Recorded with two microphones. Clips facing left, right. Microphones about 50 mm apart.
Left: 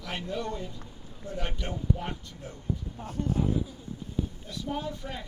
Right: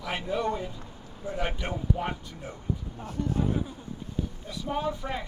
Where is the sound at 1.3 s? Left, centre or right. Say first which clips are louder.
Right 4 dB; right.